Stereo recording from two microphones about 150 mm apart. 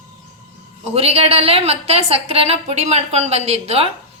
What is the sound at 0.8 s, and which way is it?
A woman's voice, 40° right (ahead or behind).